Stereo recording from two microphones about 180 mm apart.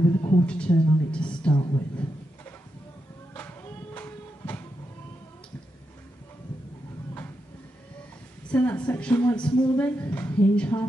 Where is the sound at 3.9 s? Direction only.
10° left (ahead or behind).